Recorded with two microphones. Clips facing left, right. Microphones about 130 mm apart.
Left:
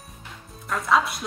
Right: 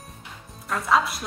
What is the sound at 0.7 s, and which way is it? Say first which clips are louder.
Speech: even; centre (ahead or behind).